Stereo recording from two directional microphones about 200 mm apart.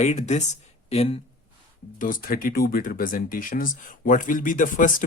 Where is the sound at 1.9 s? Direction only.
45° left (ahead or behind).